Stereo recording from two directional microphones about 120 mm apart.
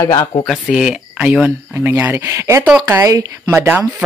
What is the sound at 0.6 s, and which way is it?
Speech, 5° right (ahead or behind).